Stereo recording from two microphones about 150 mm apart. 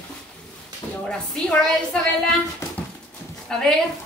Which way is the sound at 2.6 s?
20° left (ahead or behind).